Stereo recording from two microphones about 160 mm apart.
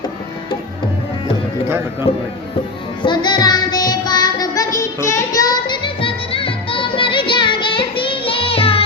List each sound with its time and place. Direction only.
2.0 s speech: 40° left (ahead or behind)
3.0 s child singing: 30° left (ahead or behind)